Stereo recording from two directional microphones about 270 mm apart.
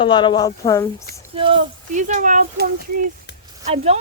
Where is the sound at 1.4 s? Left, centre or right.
Centre.